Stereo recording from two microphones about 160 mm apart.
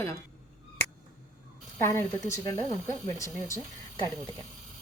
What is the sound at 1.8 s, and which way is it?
A woman's voice, 15° left (ahead or behind).